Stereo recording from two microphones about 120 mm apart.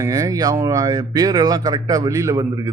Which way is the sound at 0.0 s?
30° right (ahead or behind).